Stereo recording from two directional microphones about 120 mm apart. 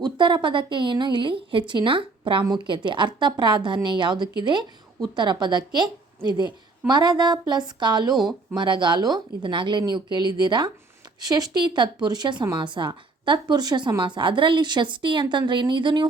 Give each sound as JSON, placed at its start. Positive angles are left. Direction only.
{"t": 0.0, "sound": "a woman's voice", "side_deg": -40}
{"t": 8.1, "sound": "speech", "side_deg": 0}
{"t": 8.5, "sound": "a woman's voice", "side_deg": -40}